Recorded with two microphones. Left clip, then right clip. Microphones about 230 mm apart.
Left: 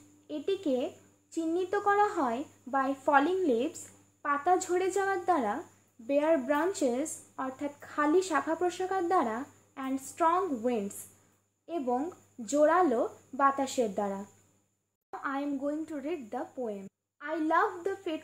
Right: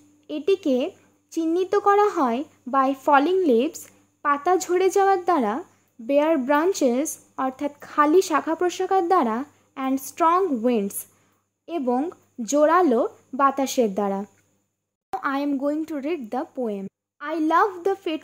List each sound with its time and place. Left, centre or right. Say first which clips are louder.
0.3 s speech: right 9 dB; right
15.2 s speech: right 9 dB; right